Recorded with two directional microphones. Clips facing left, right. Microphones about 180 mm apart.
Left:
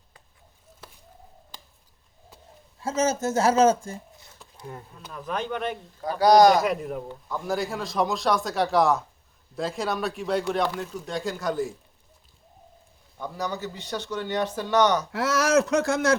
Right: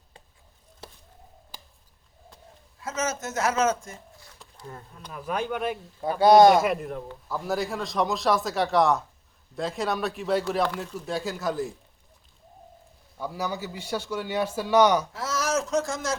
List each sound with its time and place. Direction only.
2.8 s speech: 30° left (ahead or behind)
4.5 s speech: 10° left (ahead or behind)
4.9 s a man's voice: 5° right (ahead or behind)
6.1 s speech: 25° right (ahead or behind)
6.5 s a man's voice: centre (ahead or behind)
13.1 s a man's voice: 10° right (ahead or behind)
15.1 s speech: 65° left (ahead or behind)